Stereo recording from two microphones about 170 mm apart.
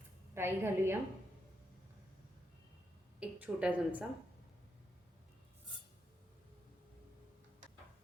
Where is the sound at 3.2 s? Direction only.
10° right (ahead or behind).